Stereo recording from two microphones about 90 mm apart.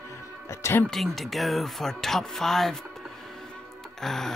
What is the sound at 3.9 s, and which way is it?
Speech, 5° left (ahead or behind).